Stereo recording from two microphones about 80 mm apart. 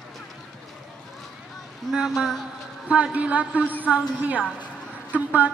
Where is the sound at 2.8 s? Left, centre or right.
Centre.